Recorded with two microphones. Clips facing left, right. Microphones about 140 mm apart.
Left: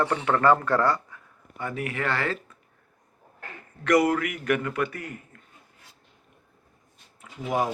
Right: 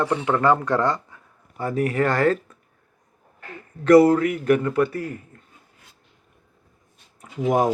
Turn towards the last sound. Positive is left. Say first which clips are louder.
# right 7 dB
turn(degrees=-40)  # may be behind; listen again after turning